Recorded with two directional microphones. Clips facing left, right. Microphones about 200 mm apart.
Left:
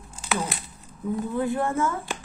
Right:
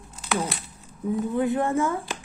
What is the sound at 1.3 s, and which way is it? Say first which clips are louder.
Speech: right 2 dB; 20° right (ahead or behind).